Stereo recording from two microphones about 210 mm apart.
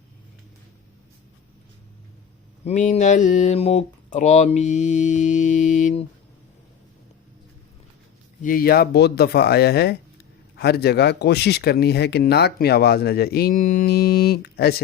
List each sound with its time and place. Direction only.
2.6 s speech: 35° left (ahead or behind)
8.4 s speech: 40° left (ahead or behind)